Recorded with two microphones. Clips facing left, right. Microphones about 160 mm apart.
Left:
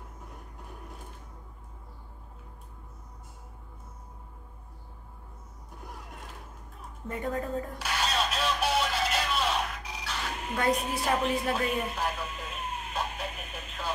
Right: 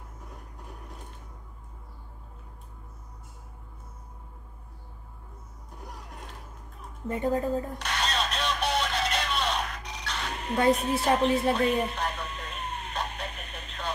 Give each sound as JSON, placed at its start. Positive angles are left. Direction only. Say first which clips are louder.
{"t": 7.1, "sound": "a woman's voice", "louder": "right 5 dB", "side_deg": -30}
{"t": 7.8, "sound": "a sound", "louder": "even", "side_deg": 5}
{"t": 10.7, "sound": "a woman's voice", "louder": "right 3 dB", "side_deg": 0}
{"t": 11.5, "sound": "radio", "louder": "right 4 dB", "side_deg": 5}